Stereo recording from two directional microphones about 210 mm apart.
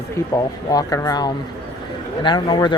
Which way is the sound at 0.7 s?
15° left (ahead or behind).